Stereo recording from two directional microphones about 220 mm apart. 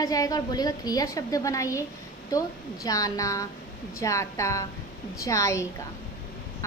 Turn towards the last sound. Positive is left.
turn(degrees=15)  # may be behind; listen again after turning